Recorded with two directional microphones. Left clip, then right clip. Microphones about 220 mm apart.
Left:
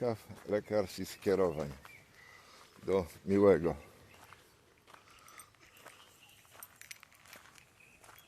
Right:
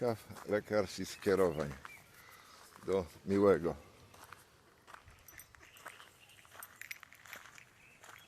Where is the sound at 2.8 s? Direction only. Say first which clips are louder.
Left 2 dB; 25° left (ahead or behind).